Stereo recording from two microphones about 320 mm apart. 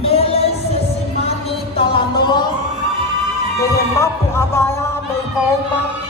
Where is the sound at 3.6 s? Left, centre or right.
Centre.